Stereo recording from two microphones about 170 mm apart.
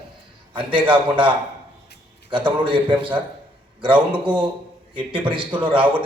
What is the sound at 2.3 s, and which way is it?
Speech, 30° right (ahead or behind).